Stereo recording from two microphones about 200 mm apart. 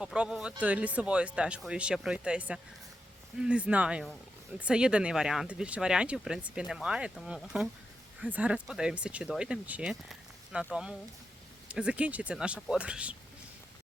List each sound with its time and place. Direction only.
0.0 s speech: 5° right (ahead or behind)